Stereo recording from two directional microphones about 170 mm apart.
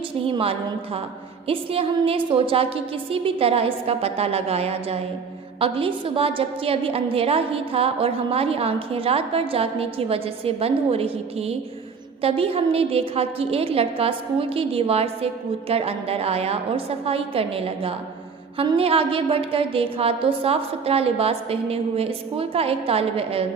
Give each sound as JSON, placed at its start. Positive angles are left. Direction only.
{"t": 0.3, "sound": "a woman's voice", "side_deg": -35}